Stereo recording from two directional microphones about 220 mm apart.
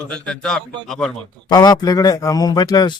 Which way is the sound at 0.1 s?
5° left (ahead or behind).